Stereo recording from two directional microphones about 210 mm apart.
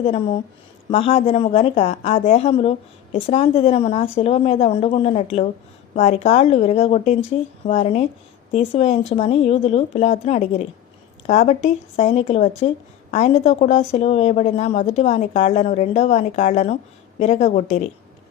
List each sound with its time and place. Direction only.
0.9 s a woman's voice: 25° left (ahead or behind)